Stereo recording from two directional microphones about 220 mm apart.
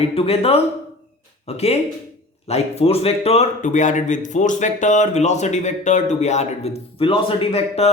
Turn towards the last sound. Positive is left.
turn(degrees=25)  # may be behind; listen again after turning